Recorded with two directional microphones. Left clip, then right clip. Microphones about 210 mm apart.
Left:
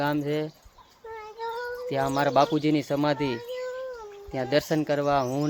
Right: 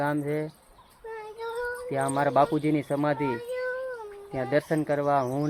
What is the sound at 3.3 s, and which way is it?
Cat, 25° right (ahead or behind).